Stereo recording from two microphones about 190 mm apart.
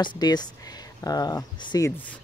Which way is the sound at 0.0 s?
20° left (ahead or behind).